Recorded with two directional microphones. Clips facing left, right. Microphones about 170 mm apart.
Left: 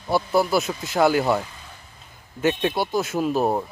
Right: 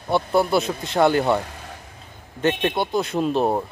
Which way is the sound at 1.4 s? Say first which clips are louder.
Right 4 dB; 70° right (ahead or behind).